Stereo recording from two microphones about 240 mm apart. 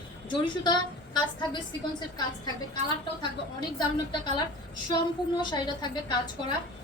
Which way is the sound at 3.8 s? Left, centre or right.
Centre.